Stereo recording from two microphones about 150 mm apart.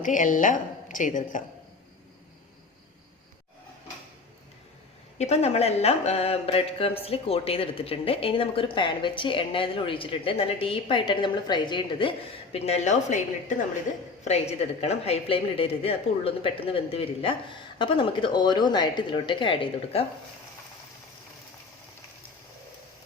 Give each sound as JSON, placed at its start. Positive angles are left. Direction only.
{"t": 0.0, "sound": "a woman's voice", "side_deg": 60}
{"t": 5.1, "sound": "speech", "side_deg": 45}
{"t": 12.5, "sound": "a woman's voice", "side_deg": 45}